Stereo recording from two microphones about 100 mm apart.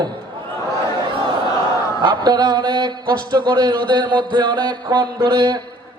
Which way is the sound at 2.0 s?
45° right (ahead or behind).